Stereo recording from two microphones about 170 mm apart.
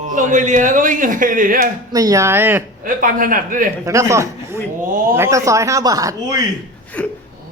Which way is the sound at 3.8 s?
20° right (ahead or behind).